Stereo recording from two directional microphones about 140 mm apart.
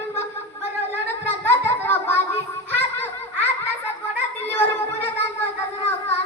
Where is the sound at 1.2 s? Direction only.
15° left (ahead or behind).